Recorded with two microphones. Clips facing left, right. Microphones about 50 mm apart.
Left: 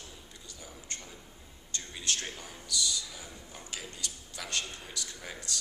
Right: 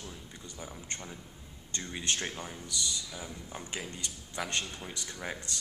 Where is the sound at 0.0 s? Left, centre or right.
Right.